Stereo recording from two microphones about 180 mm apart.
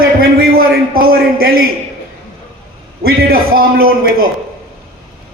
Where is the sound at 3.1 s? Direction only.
55° right (ahead or behind).